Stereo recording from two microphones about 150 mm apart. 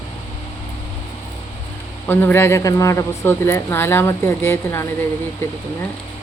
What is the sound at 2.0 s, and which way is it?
Speech, 15° left (ahead or behind).